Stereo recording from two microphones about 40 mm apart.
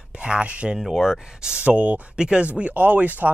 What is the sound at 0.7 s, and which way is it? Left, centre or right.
Speech, centre.